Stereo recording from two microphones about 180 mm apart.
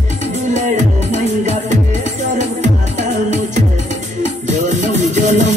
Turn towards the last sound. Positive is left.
turn(degrees=-40)  # may be behind; listen again after turning